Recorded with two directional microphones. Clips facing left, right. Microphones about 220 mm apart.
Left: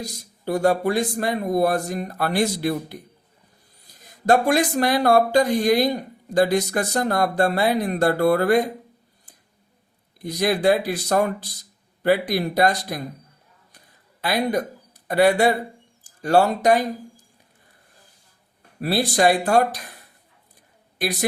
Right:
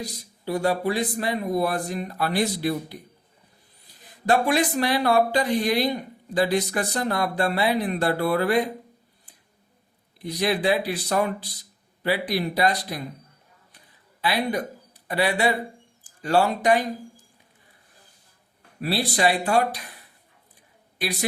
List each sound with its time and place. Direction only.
0.0 s speech: 45° left (ahead or behind)
10.2 s speech: 45° left (ahead or behind)
13.7 s a sound: 45° left (ahead or behind)
15.0 s speech: 45° left (ahead or behind)
18.8 s speech: 45° left (ahead or behind)
21.0 s speech: 45° left (ahead or behind)